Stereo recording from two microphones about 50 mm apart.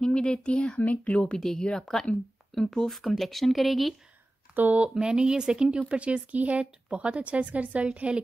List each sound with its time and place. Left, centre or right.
0.0 s speech: centre
1.4 s speech: centre
4.6 s speech: right
4.8 s speech: centre